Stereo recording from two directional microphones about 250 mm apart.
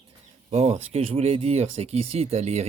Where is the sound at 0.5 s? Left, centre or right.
Right.